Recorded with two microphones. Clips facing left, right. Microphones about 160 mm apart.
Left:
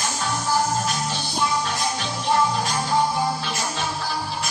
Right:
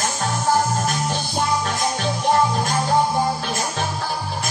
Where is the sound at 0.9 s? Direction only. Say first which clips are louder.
Right 3 dB; 50° right (ahead or behind).